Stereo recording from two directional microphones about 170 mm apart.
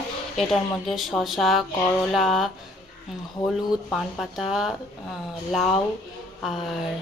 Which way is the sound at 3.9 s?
Centre (ahead or behind).